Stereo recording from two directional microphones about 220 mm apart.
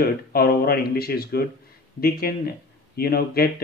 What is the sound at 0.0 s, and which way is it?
Speech, 45° left (ahead or behind).